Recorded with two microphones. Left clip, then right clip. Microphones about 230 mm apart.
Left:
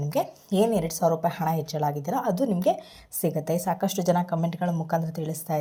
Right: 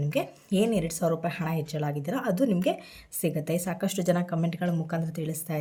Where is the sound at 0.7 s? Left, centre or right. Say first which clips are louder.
Left 3 dB; right.